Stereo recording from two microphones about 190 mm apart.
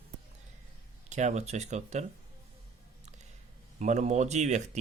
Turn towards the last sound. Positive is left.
turn(degrees=-35)  # may be behind; listen again after turning